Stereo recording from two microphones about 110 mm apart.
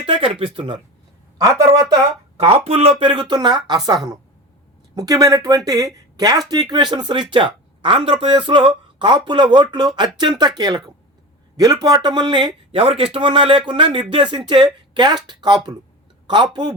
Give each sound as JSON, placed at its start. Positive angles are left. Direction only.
{"t": 0.0, "sound": "speech", "side_deg": -60}
{"t": 1.4, "sound": "speech", "side_deg": -35}
{"t": 2.4, "sound": "speech", "side_deg": -65}
{"t": 4.9, "sound": "speech", "side_deg": -35}